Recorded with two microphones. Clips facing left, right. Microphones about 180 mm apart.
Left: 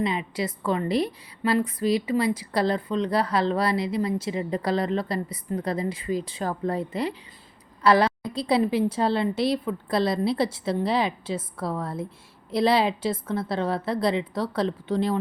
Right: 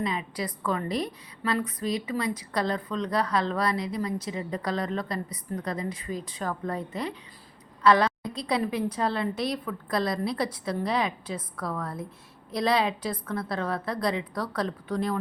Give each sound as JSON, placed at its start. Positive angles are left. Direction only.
{"t": 0.0, "sound": "a woman's voice", "side_deg": 25}